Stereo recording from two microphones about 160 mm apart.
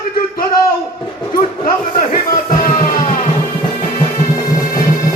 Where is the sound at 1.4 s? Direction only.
55° left (ahead or behind).